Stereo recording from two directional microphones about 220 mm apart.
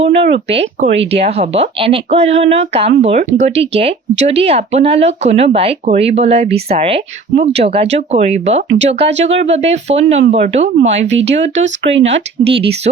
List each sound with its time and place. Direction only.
0.0 s speech: 30° right (ahead or behind)